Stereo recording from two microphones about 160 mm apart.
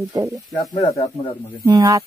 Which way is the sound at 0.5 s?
25° left (ahead or behind).